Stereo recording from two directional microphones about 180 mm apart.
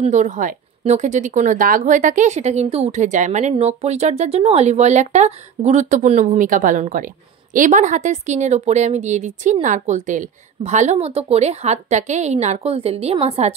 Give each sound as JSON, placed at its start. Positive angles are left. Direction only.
{"t": 0.0, "sound": "speech", "side_deg": -40}